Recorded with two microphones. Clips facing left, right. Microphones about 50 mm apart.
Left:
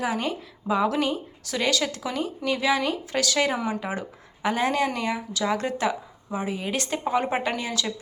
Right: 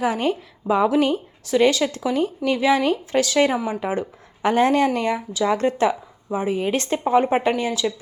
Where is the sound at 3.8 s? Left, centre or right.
Right.